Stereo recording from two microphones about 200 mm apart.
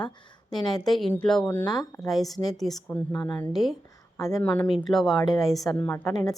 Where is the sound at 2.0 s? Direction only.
Centre (ahead or behind).